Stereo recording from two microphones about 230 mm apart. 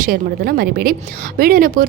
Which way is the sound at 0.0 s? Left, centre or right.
Right.